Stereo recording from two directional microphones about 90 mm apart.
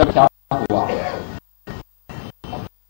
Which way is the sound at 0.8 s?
20° left (ahead or behind).